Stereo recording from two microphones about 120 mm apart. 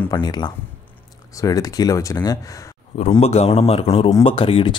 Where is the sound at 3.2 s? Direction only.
60° left (ahead or behind).